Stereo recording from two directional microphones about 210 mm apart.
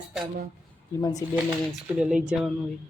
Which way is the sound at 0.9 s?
15° left (ahead or behind).